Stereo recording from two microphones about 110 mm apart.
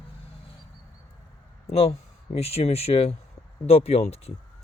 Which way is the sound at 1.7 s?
65° left (ahead or behind).